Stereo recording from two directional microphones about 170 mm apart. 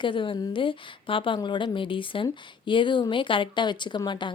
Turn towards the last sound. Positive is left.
turn(degrees=25)  # may be behind; listen again after turning